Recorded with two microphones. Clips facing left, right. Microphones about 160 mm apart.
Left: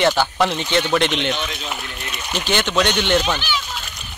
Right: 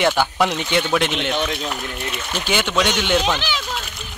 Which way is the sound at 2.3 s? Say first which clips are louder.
Left 1 dB; 10° right (ahead or behind).